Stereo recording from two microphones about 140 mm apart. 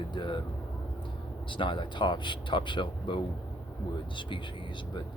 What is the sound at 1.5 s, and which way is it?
Speech, 35° left (ahead or behind).